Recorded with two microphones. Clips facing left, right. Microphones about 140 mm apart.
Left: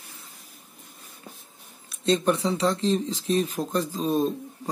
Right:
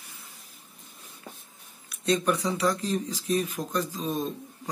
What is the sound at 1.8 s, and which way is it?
Speech, 30° left (ahead or behind).